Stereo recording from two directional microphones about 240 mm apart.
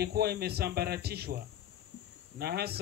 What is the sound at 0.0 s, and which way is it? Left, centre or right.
Speech, right.